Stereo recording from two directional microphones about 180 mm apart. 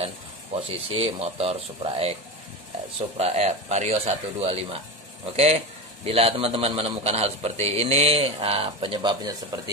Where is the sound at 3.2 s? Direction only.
35° right (ahead or behind).